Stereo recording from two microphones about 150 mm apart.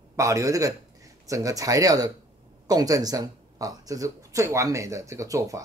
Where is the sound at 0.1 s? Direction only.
20° right (ahead or behind).